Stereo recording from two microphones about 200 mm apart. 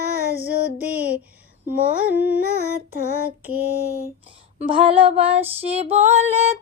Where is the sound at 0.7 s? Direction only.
5° right (ahead or behind).